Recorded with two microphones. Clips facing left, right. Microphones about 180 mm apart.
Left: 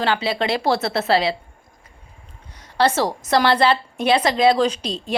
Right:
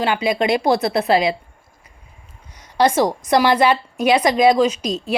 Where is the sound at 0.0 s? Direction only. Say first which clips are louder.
Right 3 dB; 15° right (ahead or behind).